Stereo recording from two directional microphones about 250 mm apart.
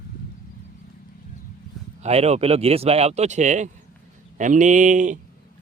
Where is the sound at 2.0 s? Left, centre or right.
Right.